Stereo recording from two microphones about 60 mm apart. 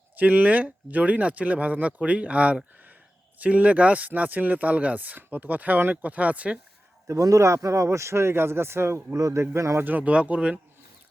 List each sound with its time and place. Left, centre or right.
0.2 s speech: right
7.1 s speech: right
9.1 s a man's voice: right
9.4 s speech: right
9.8 s speech: right